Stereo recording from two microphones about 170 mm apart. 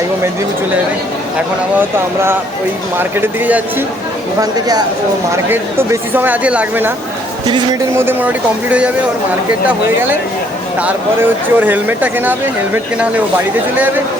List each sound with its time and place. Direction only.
3.0 s speech: 10° right (ahead or behind)
4.4 s speech: 25° right (ahead or behind)
7.9 s speech: 10° right (ahead or behind)
10.8 s speech: 10° right (ahead or behind)